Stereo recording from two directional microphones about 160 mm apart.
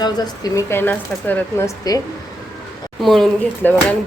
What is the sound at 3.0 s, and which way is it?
Speech, centre (ahead or behind).